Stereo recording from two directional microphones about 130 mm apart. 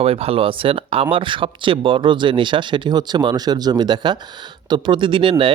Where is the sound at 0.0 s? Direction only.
50° right (ahead or behind).